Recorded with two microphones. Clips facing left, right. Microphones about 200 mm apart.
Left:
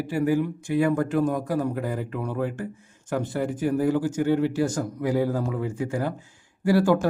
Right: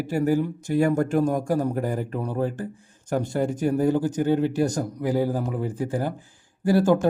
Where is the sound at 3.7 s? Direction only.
25° right (ahead or behind).